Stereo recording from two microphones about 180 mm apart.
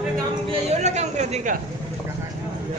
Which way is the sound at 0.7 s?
40° right (ahead or behind).